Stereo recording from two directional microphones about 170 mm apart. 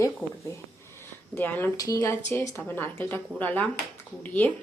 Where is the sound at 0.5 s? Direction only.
20° left (ahead or behind).